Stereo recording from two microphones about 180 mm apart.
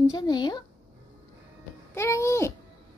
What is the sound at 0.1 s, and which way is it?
Speech, 25° left (ahead or behind).